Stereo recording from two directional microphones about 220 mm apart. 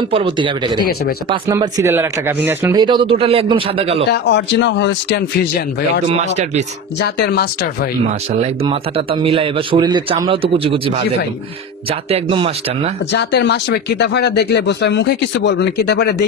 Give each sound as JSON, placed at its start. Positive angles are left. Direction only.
{"t": 0.1, "sound": "speech", "side_deg": -20}
{"t": 4.1, "sound": "speech", "side_deg": 50}
{"t": 6.0, "sound": "speech", "side_deg": -30}
{"t": 8.4, "sound": "speech", "side_deg": -25}
{"t": 12.1, "sound": "speech", "side_deg": -25}
{"t": 13.1, "sound": "speech", "side_deg": 50}